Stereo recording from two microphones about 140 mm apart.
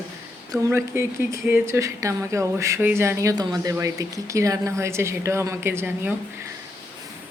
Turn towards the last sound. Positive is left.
turn(degrees=-15)  # may be behind; listen again after turning